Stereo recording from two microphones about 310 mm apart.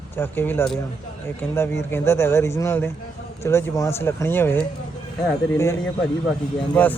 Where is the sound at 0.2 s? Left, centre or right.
Centre.